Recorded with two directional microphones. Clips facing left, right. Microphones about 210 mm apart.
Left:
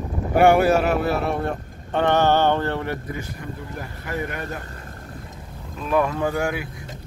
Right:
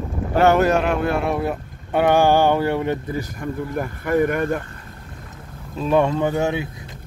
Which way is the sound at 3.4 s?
55° right (ahead or behind).